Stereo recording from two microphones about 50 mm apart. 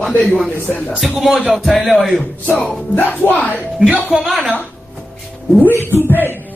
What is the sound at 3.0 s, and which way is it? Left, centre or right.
Speech, left.